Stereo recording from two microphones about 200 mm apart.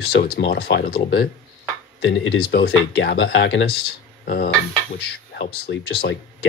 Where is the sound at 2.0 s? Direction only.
65° left (ahead or behind).